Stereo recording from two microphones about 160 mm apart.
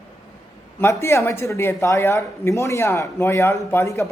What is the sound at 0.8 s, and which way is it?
Speech, 15° left (ahead or behind).